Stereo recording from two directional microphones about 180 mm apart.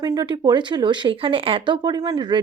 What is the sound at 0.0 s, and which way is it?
Speech, 20° right (ahead or behind).